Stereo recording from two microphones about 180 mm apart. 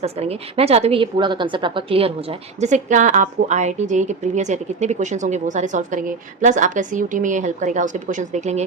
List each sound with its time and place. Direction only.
0.0 s a woman's voice: 35° right (ahead or behind)
2.6 s a woman's voice: 40° right (ahead or behind)